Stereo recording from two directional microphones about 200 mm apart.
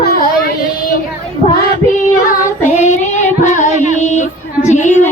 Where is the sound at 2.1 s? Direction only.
40° left (ahead or behind).